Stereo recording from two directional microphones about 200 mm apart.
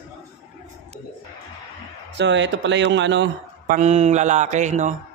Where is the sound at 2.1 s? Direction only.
65° right (ahead or behind).